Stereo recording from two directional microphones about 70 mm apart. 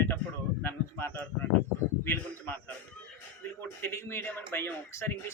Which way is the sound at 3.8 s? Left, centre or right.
Left.